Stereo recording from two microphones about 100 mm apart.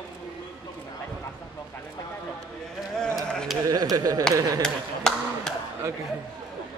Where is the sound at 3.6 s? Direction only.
40° right (ahead or behind).